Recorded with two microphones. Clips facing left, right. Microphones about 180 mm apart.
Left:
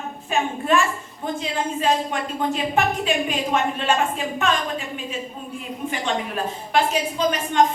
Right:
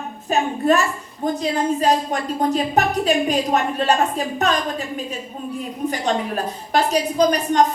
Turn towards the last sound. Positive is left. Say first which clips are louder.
# right 3 dB
turn(degrees=-40)  # may be behind; listen again after turning